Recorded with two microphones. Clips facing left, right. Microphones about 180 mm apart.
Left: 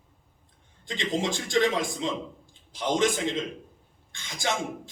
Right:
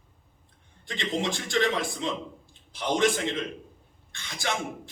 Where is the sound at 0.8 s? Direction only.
15° left (ahead or behind).